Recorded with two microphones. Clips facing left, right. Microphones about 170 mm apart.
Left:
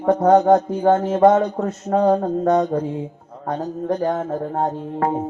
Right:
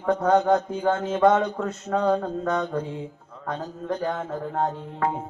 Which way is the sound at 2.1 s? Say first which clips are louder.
Left 7 dB; 45° left (ahead or behind).